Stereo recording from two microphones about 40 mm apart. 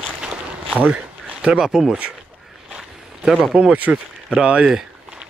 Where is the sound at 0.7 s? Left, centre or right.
Right.